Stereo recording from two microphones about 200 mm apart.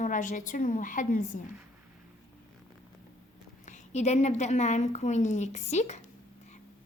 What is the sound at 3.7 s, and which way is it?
A woman's voice, 35° left (ahead or behind).